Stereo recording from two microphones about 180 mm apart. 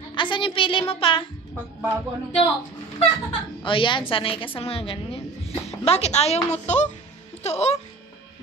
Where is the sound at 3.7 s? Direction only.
30° left (ahead or behind).